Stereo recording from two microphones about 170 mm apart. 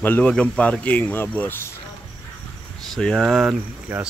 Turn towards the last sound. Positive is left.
turn(degrees=-10)  # may be behind; listen again after turning